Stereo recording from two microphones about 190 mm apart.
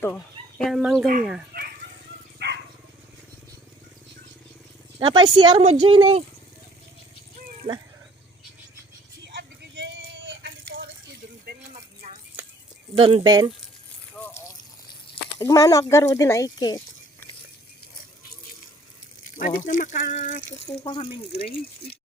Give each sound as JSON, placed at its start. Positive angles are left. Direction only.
{"t": 0.6, "sound": "speech", "side_deg": 0}
{"t": 1.5, "sound": "dog", "side_deg": -55}
{"t": 4.9, "sound": "speech", "side_deg": -25}
{"t": 7.6, "sound": "speech", "side_deg": -30}
{"t": 9.2, "sound": "a sound", "side_deg": -60}
{"t": 11.7, "sound": "a sound", "side_deg": -35}
{"t": 13.0, "sound": "speech", "side_deg": -25}
{"t": 14.2, "sound": "a sound", "side_deg": 5}
{"t": 15.4, "sound": "speech", "side_deg": 20}
{"t": 19.2, "sound": "speech", "side_deg": 45}
{"t": 20.7, "sound": "speech", "side_deg": 30}